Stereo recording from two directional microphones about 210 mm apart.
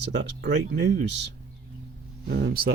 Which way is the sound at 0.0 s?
55° right (ahead or behind).